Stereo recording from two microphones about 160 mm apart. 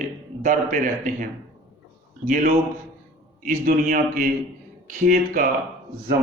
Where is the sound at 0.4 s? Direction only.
55° right (ahead or behind).